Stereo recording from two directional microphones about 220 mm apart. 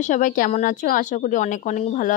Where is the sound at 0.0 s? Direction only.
35° left (ahead or behind).